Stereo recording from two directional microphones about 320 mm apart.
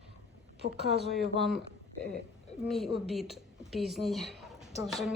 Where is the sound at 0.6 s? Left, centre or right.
Right.